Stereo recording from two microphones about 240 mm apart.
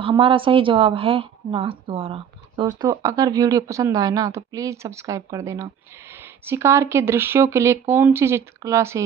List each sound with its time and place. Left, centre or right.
0.0 s a woman's voice: right